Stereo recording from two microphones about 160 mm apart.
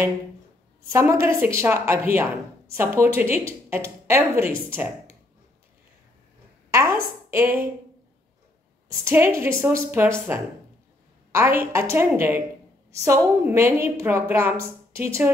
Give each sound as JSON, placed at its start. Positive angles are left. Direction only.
{"t": 0.9, "sound": "a woman's voice", "side_deg": -15}
{"t": 6.7, "sound": "a woman's voice", "side_deg": -15}
{"t": 8.8, "sound": "a woman's voice", "side_deg": -15}